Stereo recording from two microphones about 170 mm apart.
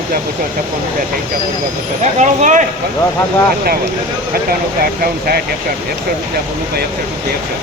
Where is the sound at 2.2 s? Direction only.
45° right (ahead or behind).